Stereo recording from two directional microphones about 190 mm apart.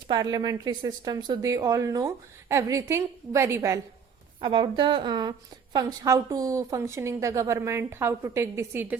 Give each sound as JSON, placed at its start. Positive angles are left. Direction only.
{"t": 0.1, "sound": "speech", "side_deg": -20}
{"t": 4.4, "sound": "a woman's voice", "side_deg": -25}